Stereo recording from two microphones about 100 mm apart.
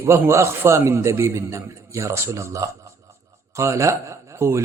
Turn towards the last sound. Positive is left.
turn(degrees=-30)  # may be behind; listen again after turning